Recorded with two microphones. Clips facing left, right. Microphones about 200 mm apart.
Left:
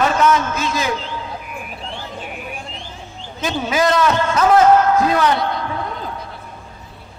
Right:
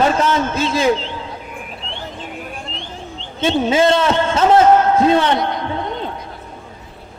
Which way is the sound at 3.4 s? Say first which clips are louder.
Right 4 dB; 25° right (ahead or behind).